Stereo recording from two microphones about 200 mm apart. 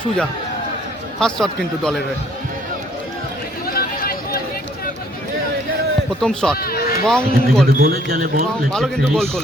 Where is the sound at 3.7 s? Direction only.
45° left (ahead or behind).